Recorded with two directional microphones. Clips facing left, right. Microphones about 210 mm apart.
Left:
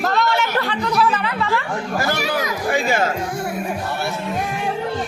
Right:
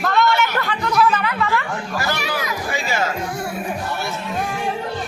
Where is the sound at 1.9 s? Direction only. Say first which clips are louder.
Left 3 dB; 45° left (ahead or behind).